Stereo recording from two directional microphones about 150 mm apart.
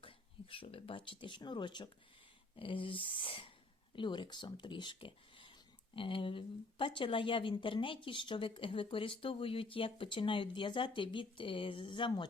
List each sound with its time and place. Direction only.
0.0 s speech: 35° left (ahead or behind)